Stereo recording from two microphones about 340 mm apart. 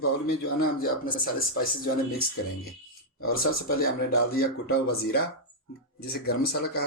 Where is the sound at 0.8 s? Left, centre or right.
Left.